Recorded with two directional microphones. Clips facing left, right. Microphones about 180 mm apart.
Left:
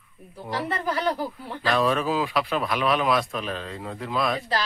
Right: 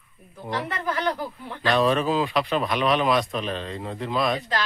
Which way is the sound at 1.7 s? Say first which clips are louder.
Right 2 dB; centre (ahead or behind).